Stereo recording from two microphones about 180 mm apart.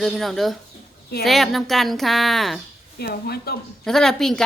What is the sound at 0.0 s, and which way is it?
A woman's voice, centre (ahead or behind).